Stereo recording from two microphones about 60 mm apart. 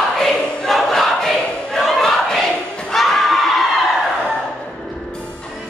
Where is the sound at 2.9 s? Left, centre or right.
Centre.